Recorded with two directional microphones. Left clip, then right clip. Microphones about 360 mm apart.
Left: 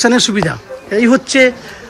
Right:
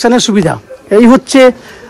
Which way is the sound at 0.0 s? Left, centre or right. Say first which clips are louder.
Right 3 dB; centre.